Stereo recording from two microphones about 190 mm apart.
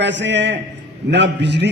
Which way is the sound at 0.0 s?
70° right (ahead or behind).